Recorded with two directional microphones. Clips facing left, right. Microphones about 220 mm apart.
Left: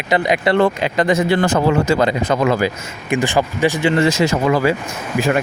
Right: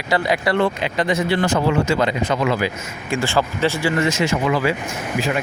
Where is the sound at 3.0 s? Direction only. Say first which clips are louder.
Left 3 dB; 20° left (ahead or behind).